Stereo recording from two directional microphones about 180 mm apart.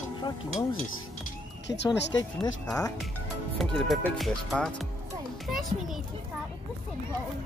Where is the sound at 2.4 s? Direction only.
20° left (ahead or behind).